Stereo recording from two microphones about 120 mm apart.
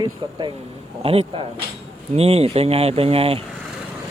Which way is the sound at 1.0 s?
50° right (ahead or behind).